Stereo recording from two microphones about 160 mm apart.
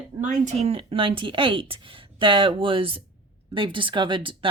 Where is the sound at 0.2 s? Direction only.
50° right (ahead or behind).